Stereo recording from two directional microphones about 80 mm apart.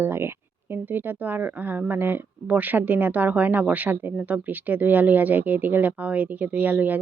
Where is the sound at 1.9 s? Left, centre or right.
Right.